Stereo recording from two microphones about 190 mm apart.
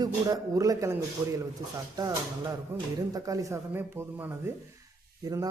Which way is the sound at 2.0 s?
15° right (ahead or behind).